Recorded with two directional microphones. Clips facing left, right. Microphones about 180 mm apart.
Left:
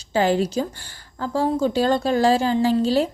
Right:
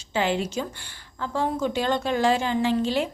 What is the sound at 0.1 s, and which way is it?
A woman's voice, 40° left (ahead or behind).